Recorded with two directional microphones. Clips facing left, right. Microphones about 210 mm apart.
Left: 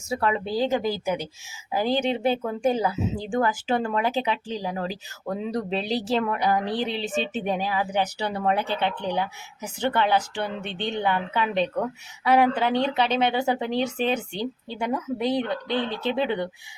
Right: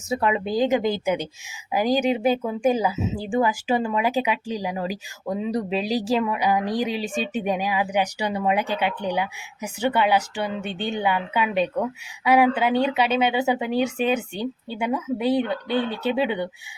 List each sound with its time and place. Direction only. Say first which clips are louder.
0.1 s speech: right 2 dB; 15° right (ahead or behind)